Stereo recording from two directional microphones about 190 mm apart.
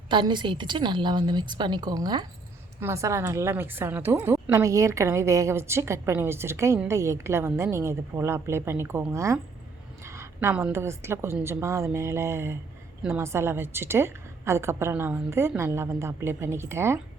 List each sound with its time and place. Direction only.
0.1 s a woman's voice: 25° right (ahead or behind)